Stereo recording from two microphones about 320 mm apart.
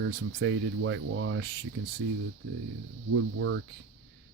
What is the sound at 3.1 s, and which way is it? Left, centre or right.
Speech, right.